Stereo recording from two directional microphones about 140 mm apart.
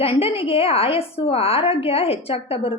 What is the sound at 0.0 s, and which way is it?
A woman's voice, 45° left (ahead or behind).